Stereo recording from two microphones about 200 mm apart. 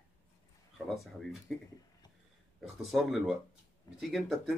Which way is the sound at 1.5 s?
Centre (ahead or behind).